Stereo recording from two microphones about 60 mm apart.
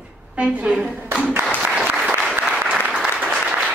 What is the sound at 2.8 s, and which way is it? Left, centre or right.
Applause, centre.